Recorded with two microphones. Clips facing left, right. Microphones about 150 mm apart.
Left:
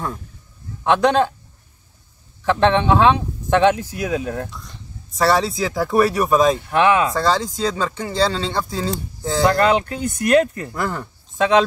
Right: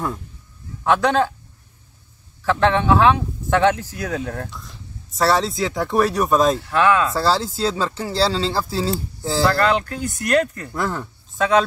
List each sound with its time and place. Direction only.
0.8 s speech: 20° left (ahead or behind)
2.4 s speech: 20° left (ahead or behind)
4.5 s speech: centre (ahead or behind)
6.7 s speech: 20° left (ahead or behind)
7.2 s speech: 5° right (ahead or behind)
9.6 s speech: 20° left (ahead or behind)
10.7 s speech: centre (ahead or behind)
11.3 s speech: 20° left (ahead or behind)